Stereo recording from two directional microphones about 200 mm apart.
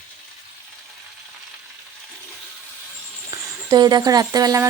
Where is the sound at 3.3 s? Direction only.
20° right (ahead or behind).